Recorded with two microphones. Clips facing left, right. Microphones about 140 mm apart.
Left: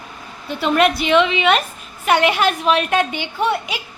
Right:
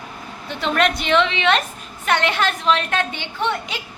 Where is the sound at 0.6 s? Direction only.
5° left (ahead or behind).